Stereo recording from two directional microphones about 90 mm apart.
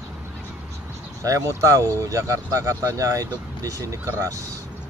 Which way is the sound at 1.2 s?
35° right (ahead or behind).